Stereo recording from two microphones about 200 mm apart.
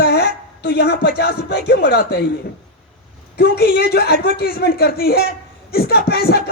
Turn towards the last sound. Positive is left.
turn(degrees=55)  # may be behind; listen again after turning